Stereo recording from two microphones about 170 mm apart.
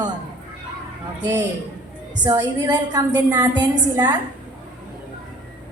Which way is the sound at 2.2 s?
20° right (ahead or behind).